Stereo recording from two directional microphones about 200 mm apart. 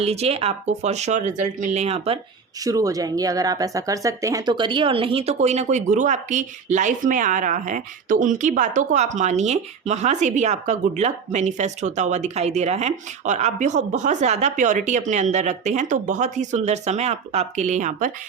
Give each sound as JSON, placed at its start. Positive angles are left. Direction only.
{"t": 0.0, "sound": "speech", "side_deg": -30}
{"t": 2.6, "sound": "speech", "side_deg": -15}